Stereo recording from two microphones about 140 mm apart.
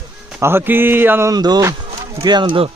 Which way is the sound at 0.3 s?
15° right (ahead or behind).